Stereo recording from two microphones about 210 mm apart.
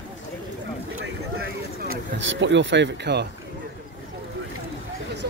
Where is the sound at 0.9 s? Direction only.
65° right (ahead or behind).